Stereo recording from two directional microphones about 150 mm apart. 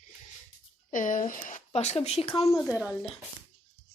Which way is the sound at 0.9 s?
60° left (ahead or behind).